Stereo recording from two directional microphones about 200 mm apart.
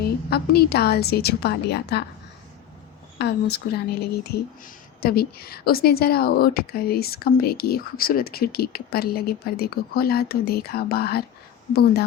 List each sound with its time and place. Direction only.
0.3 s speech: 50° left (ahead or behind)
3.2 s speech: 55° left (ahead or behind)